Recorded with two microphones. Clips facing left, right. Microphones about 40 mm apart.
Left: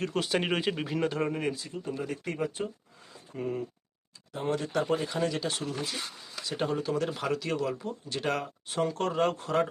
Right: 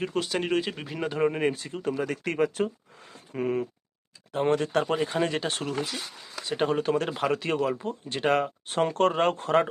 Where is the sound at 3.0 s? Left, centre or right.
Right.